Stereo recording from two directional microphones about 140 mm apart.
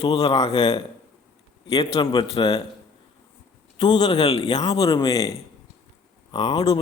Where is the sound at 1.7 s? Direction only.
45° left (ahead or behind).